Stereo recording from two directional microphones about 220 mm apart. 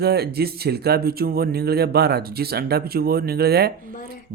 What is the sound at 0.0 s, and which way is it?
Speech, 45° right (ahead or behind).